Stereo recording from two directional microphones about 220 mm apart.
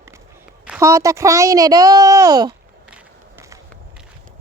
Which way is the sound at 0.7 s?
15° right (ahead or behind).